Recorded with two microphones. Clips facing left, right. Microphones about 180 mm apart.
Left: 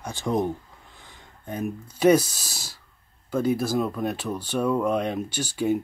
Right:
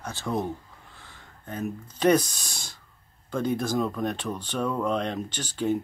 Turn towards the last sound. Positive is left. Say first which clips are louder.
# left 2 dB
turn(degrees=10)  # may be behind; listen again after turning